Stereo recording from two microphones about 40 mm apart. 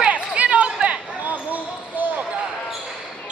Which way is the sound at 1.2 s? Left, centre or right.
Right.